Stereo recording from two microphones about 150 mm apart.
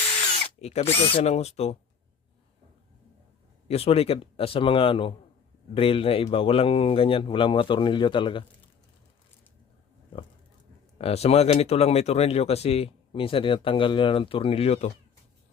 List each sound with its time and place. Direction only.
0.4 s speech: 45° left (ahead or behind)
3.7 s speech: 40° left (ahead or behind)
10.9 s speech: 40° left (ahead or behind)